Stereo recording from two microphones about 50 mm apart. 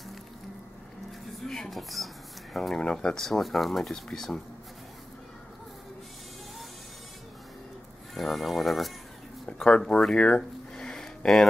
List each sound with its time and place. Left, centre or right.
1.4 s a sound: centre
2.7 s speech: centre
3.3 s speech: centre
8.1 s speech: centre
9.7 s speech: centre